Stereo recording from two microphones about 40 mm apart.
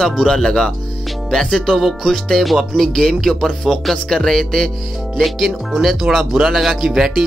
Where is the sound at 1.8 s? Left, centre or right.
Centre.